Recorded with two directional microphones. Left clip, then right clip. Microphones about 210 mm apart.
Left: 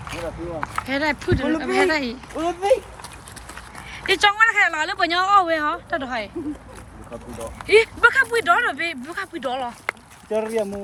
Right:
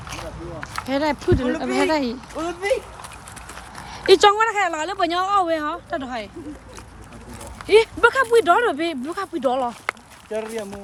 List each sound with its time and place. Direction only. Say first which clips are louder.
0.9 s speech: right 3 dB; 15° right (ahead or behind)
2.3 s speech: left 4 dB; 30° left (ahead or behind)
3.8 s horse: right 5 dB; 30° right (ahead or behind)
4.4 s speech: left 3 dB; 20° right (ahead or behind)
7.7 s speech: even; 20° right (ahead or behind)
10.3 s speech: left 4 dB; 35° left (ahead or behind)